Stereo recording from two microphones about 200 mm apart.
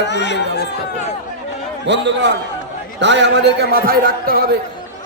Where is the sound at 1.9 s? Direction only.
60° right (ahead or behind).